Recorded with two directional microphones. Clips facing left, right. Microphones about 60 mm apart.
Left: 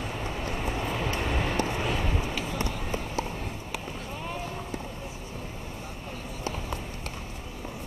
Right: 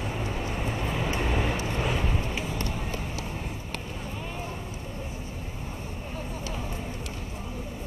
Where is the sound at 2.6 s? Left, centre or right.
Centre.